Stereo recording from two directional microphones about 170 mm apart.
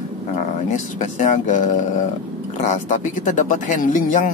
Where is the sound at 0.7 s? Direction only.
45° left (ahead or behind).